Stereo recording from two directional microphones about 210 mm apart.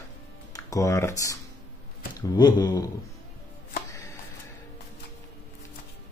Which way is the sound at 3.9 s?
15° left (ahead or behind).